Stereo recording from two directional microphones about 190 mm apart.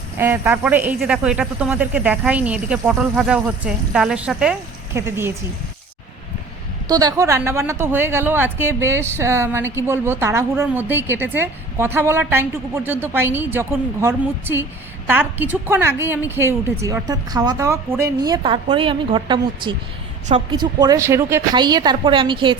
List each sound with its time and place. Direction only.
0.2 s a woman's voice: 10° right (ahead or behind)
6.8 s a woman's voice: 20° right (ahead or behind)